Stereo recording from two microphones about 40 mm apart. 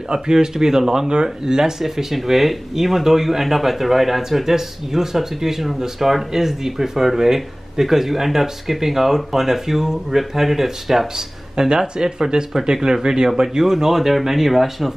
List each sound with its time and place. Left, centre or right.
0.1 s speech: centre